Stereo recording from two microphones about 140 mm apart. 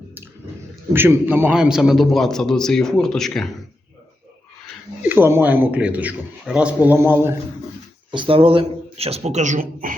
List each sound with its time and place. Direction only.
0.9 s a man's voice: 15° right (ahead or behind); by 3.5 s 5° left (ahead or behind)
5.0 s a man's voice: 15° right (ahead or behind)
8.1 s speech: 40° right (ahead or behind); by 9.9 s 70° right (ahead or behind)